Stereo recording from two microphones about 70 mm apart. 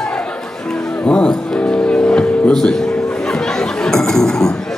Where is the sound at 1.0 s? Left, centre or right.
Centre.